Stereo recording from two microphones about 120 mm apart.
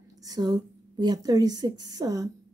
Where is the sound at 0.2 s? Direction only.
35° right (ahead or behind).